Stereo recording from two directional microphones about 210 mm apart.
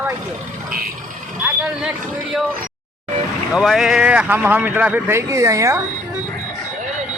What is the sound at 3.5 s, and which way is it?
Speech, centre (ahead or behind).